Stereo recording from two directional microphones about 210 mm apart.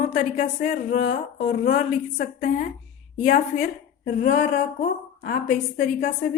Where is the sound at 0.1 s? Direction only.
45° left (ahead or behind).